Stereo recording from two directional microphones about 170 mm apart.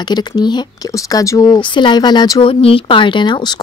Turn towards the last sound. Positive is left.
turn(degrees=25)  # may be behind; listen again after turning